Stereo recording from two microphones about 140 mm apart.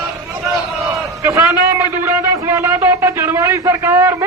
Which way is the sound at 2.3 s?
20° right (ahead or behind).